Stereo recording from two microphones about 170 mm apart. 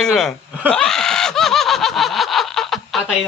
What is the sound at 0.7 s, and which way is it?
Snicker, 5° left (ahead or behind).